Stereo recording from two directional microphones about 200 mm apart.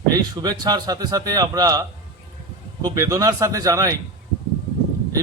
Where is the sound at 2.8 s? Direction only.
15° right (ahead or behind).